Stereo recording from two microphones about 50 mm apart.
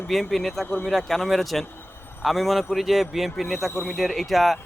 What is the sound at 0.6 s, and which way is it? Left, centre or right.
Speech, left.